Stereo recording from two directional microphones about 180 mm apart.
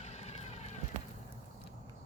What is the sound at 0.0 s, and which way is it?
Vehicle, 35° left (ahead or behind).